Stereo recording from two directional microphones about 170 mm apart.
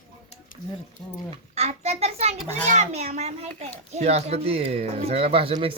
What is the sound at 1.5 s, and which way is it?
A child's voice, 40° right (ahead or behind).